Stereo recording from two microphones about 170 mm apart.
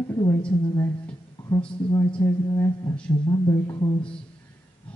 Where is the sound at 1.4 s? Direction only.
10° left (ahead or behind).